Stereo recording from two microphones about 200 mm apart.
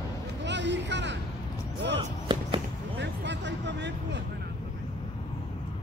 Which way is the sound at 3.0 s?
60° right (ahead or behind).